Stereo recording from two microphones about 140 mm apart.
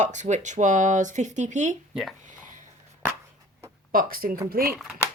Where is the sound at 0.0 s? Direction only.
60° right (ahead or behind).